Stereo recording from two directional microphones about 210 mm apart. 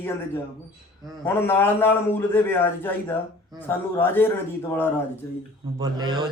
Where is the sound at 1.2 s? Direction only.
10° left (ahead or behind).